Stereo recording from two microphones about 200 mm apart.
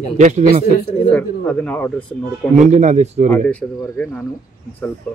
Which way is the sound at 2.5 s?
35° right (ahead or behind).